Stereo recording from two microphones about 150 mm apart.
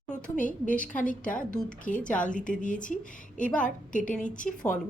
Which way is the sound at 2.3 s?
60° left (ahead or behind).